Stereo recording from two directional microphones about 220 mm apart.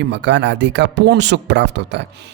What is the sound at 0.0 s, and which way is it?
Speech, 55° right (ahead or behind).